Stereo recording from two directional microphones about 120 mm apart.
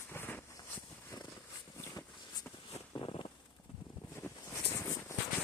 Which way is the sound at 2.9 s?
40° left (ahead or behind).